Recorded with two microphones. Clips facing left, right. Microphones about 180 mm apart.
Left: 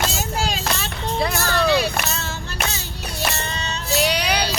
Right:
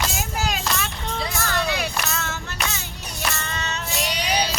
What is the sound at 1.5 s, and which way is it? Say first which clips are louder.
Music: left 7 dB; 30° left (ahead or behind).